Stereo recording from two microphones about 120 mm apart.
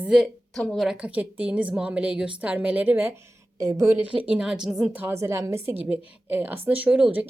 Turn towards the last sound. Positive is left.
turn(degrees=-10)  # may be behind; listen again after turning